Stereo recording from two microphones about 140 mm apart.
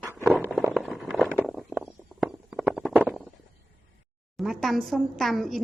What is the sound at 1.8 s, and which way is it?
Stomach rumble, 10° right (ahead or behind).